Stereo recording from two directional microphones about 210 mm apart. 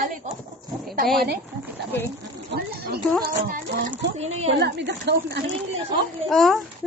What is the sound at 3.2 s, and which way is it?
Music, 40° right (ahead or behind).